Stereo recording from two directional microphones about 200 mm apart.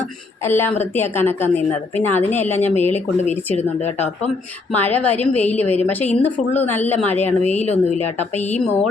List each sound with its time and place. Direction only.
0.4 s a woman's voice: 10° left (ahead or behind)
2.9 s speech: 35° left (ahead or behind)
4.7 s a woman's voice: 10° left (ahead or behind)
7.7 s speech: 35° left (ahead or behind)